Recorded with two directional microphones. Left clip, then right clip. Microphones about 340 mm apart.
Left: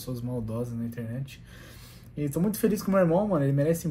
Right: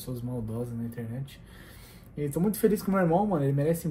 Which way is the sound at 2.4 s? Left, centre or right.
Centre.